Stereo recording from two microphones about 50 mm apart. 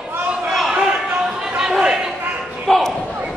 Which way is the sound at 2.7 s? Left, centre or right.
Centre.